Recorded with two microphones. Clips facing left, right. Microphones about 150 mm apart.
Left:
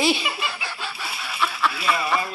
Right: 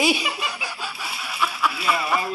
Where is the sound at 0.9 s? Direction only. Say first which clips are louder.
Even; 5° right (ahead or behind).